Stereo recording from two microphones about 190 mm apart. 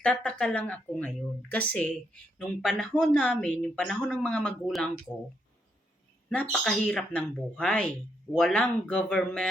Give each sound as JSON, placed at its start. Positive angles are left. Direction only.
{"t": 0.0, "sound": "a woman's voice", "side_deg": 5}
{"t": 6.2, "sound": "a woman's voice", "side_deg": 5}